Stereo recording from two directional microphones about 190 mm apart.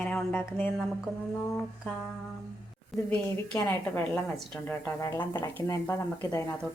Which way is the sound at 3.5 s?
15° left (ahead or behind).